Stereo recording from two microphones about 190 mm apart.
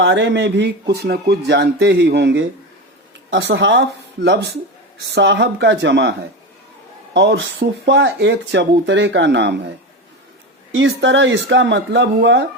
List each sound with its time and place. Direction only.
0.0 s speech: 70° right (ahead or behind)
10.8 s speech: 75° right (ahead or behind)